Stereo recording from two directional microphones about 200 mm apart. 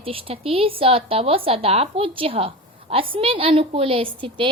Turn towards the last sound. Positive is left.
turn(degrees=-25)  # may be behind; listen again after turning